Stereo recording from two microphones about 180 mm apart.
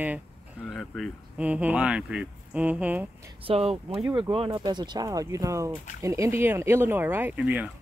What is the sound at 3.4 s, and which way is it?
Speech, 30° right (ahead or behind).